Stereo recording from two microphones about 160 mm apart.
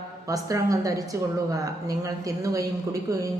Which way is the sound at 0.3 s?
20° right (ahead or behind).